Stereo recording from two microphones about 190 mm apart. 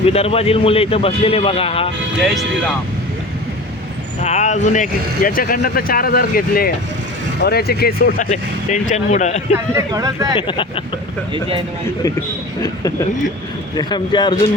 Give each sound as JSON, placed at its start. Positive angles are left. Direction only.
{"t": 0.0, "sound": "a man's voice", "side_deg": 30}
{"t": 2.2, "sound": "speech", "side_deg": 0}
{"t": 4.2, "sound": "speech", "side_deg": 35}
{"t": 9.7, "sound": "speech", "side_deg": -20}
{"t": 10.3, "sound": "a man's voice", "side_deg": 25}
{"t": 13.7, "sound": "a man's voice", "side_deg": 25}